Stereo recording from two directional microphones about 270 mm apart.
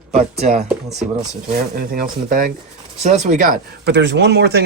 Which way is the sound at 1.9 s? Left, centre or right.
Right.